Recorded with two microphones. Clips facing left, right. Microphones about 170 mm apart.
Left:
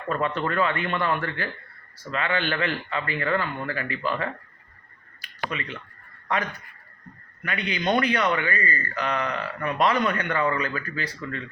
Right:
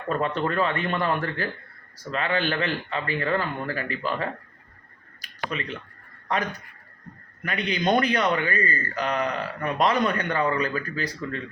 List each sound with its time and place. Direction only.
0.1 s a man's voice: 35° right (ahead or behind)
5.2 s a sound: 40° right (ahead or behind)
6.2 s a man's voice: 40° right (ahead or behind)